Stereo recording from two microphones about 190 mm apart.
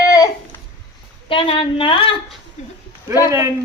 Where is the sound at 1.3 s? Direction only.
25° left (ahead or behind).